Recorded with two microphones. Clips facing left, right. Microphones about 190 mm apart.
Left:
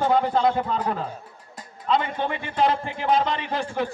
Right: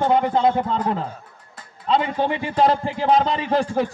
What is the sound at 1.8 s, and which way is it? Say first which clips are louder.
A man's voice: right 4 dB; 30° right (ahead or behind).